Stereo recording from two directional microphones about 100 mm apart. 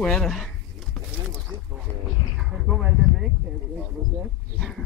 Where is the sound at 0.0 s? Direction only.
5° left (ahead or behind).